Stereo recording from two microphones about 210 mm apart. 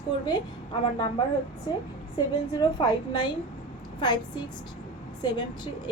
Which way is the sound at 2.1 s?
20° left (ahead or behind).